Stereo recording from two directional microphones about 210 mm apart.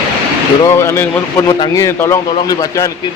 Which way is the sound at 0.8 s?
10° left (ahead or behind).